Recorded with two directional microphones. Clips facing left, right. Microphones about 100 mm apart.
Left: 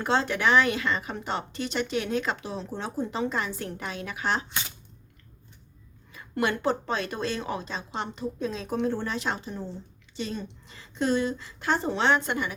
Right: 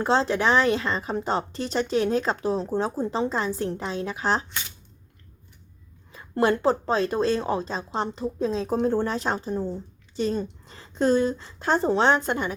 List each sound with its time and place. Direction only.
0.0 s a woman's voice: 30° right (ahead or behind)
6.1 s a woman's voice: 30° right (ahead or behind)